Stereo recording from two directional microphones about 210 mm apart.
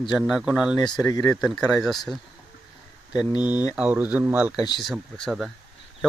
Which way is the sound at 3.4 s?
10° right (ahead or behind).